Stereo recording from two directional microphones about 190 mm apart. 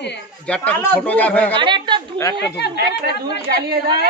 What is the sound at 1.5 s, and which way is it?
Speech, 25° right (ahead or behind).